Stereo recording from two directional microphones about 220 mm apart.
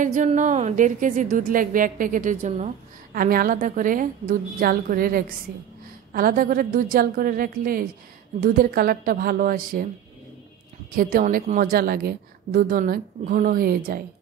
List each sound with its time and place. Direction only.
0.0 s a woman's voice: 35° right (ahead or behind)
11.0 s a woman's voice: 40° right (ahead or behind)